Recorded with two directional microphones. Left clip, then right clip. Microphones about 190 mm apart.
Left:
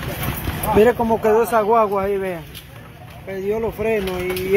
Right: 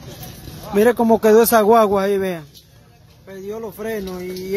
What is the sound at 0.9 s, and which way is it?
Speech, 50° right (ahead or behind).